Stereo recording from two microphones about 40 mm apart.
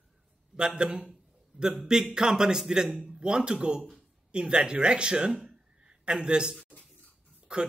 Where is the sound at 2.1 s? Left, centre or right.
Centre.